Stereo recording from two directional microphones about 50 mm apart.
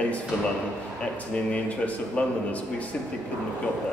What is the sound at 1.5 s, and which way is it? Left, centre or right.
A man's voice, left.